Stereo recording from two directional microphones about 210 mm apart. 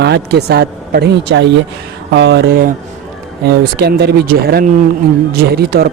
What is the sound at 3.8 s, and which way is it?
Speech, 50° right (ahead or behind).